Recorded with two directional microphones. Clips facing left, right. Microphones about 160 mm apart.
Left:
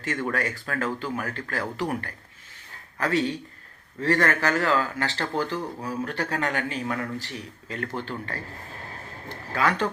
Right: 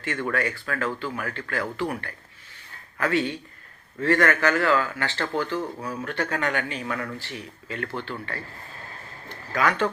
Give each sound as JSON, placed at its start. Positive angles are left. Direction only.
{"t": 0.3, "sound": "speech", "side_deg": 40}
{"t": 9.5, "sound": "speech", "side_deg": 30}